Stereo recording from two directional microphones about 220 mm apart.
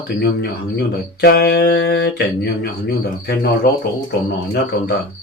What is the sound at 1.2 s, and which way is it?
Speech, 50° left (ahead or behind).